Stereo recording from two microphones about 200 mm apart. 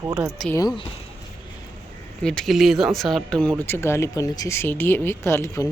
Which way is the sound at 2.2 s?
5° left (ahead or behind).